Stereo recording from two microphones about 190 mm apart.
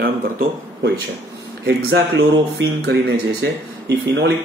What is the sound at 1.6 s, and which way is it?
Speech, 65° right (ahead or behind).